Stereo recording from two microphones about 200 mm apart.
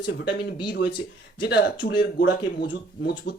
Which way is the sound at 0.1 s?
55° left (ahead or behind).